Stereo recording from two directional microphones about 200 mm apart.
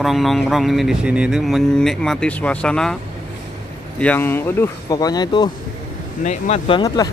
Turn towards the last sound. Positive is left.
turn(degrees=35)  # may be behind; listen again after turning